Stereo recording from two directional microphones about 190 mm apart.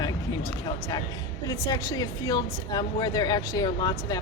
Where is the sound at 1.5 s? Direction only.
20° left (ahead or behind).